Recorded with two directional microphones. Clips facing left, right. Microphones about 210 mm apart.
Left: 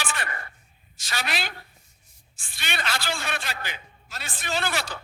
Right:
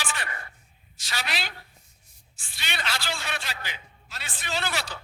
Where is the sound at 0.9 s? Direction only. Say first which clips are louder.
Left 2 dB; 50° left (ahead or behind).